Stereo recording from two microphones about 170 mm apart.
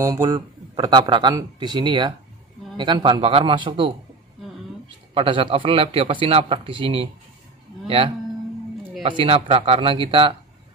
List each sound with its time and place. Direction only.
0.0 s speech: 20° right (ahead or behind)
5.1 s a man's voice: 30° right (ahead or behind)
9.0 s a man's voice: 30° right (ahead or behind)